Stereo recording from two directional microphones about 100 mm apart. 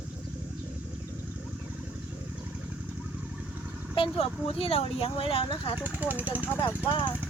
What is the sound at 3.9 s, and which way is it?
Speech, 65° left (ahead or behind).